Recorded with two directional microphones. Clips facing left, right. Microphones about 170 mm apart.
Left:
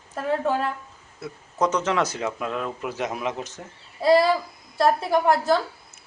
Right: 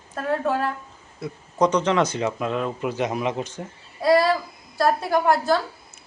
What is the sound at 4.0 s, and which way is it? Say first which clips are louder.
Speech: even; 25° left (ahead or behind).